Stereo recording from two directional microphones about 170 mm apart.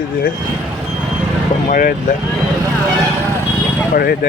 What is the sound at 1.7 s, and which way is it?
Speech, 55° left (ahead or behind).